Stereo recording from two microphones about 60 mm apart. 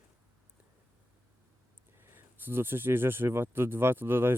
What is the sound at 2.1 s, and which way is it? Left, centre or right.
Speech, right.